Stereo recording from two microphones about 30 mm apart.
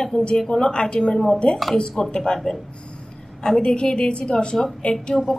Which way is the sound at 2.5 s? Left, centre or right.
Left.